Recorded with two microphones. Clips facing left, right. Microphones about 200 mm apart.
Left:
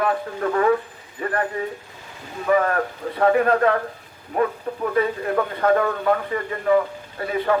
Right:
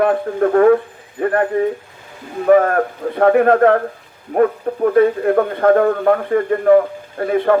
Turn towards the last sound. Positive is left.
turn(degrees=-50)  # may be behind; listen again after turning